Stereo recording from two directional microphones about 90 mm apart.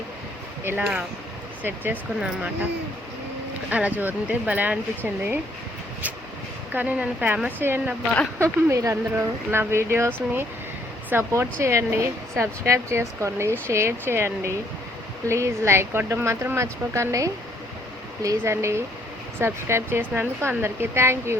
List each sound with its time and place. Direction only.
0.6 s speech: 25° right (ahead or behind)
3.7 s speech: 15° right (ahead or behind)
6.7 s speech: 15° right (ahead or behind)
8.4 s speech: 35° right (ahead or behind)